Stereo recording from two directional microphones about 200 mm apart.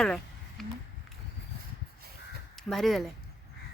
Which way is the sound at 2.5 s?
Centre (ahead or behind).